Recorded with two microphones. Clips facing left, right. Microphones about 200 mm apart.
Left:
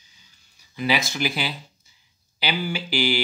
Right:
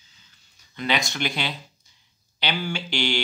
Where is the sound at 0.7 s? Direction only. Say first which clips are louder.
Left 2 dB; 5° left (ahead or behind).